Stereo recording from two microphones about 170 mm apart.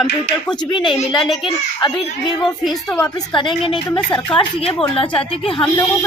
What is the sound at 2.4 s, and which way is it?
Speech, centre (ahead or behind).